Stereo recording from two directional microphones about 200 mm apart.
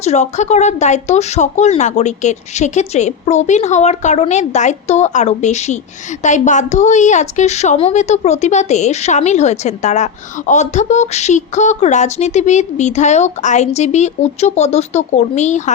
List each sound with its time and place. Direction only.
0.0 s a woman's voice: 35° left (ahead or behind)